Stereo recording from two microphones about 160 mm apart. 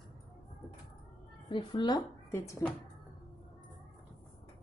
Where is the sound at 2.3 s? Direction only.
15° left (ahead or behind).